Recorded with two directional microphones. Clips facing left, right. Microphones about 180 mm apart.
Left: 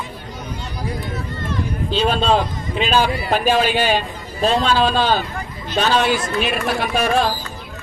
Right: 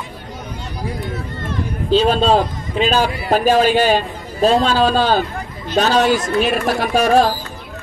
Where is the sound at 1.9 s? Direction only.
40° right (ahead or behind).